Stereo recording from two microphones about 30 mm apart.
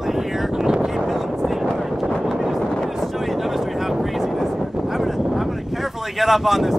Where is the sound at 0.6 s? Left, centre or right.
Right.